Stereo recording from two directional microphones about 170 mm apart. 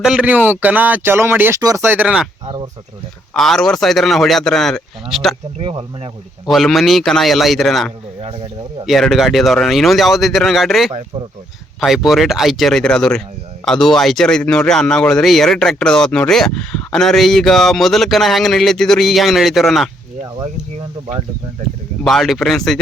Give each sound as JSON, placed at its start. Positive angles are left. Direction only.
{"t": 0.0, "sound": "speech", "side_deg": -5}
{"t": 3.3, "sound": "speech", "side_deg": 0}
{"t": 5.5, "sound": "speech", "side_deg": -30}
{"t": 6.5, "sound": "speech", "side_deg": 0}
{"t": 8.2, "sound": "speech", "side_deg": -35}
{"t": 8.9, "sound": "speech", "side_deg": 0}
{"t": 20.4, "sound": "speech", "side_deg": -35}
{"t": 22.0, "sound": "speech", "side_deg": 0}